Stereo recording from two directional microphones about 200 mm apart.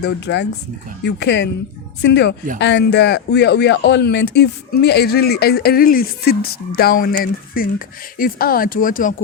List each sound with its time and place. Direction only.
0.0 s speech: 60° left (ahead or behind); by 9.1 s 45° left (ahead or behind)